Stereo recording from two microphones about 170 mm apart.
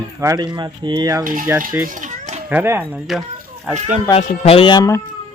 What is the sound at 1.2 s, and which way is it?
Speech, 55° right (ahead or behind).